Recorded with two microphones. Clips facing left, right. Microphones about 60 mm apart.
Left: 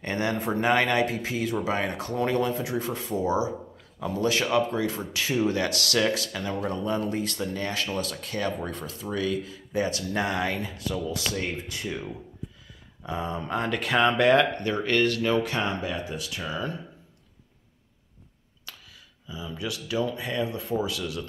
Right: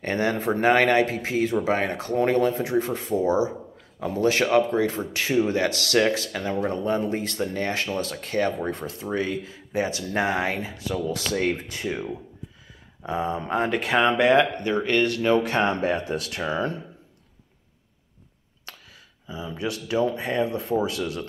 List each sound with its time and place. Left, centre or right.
0.0 s speech: right
18.7 s a sound: right
19.2 s speech: right